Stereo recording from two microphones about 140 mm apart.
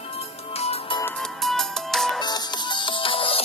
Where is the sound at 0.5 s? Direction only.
45° left (ahead or behind).